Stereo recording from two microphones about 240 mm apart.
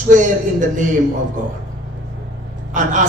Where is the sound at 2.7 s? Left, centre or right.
Right.